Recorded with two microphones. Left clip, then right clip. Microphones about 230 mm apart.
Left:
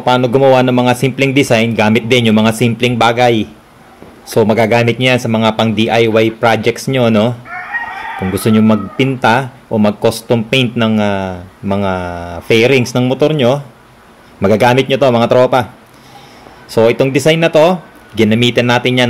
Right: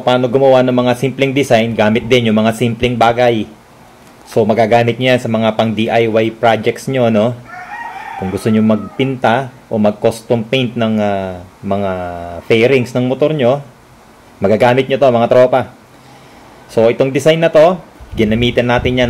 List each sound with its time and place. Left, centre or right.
0.0 s speech: centre
16.7 s speech: centre